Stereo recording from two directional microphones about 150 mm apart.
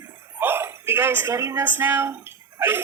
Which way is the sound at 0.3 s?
15° right (ahead or behind).